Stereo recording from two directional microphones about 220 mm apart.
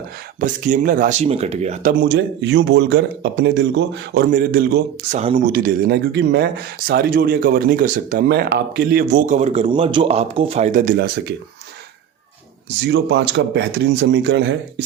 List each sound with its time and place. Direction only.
0.3 s speech: 35° right (ahead or behind)
12.9 s speech: 50° right (ahead or behind)